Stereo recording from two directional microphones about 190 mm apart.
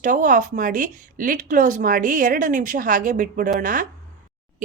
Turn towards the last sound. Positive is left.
turn(degrees=-45)  # may be behind; listen again after turning